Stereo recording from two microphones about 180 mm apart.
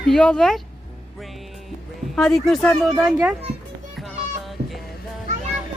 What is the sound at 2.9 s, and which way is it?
Speech, 5° right (ahead or behind).